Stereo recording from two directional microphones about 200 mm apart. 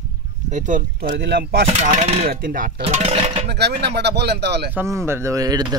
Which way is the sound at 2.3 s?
45° right (ahead or behind).